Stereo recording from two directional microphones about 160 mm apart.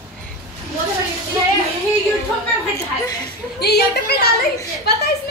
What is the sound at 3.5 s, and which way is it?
A woman's voice, 85° left.